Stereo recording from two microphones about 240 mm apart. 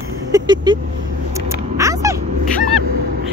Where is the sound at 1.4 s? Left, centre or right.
Centre.